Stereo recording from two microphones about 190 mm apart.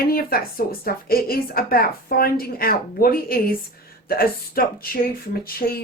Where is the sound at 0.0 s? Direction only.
50° left (ahead or behind).